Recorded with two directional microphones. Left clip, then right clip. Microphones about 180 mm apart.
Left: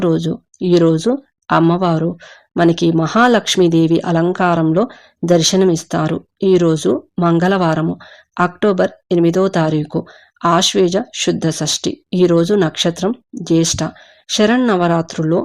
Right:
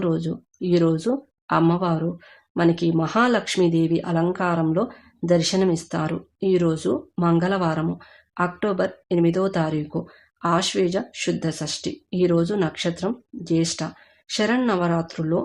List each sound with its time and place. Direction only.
0.0 s speech: 35° left (ahead or behind)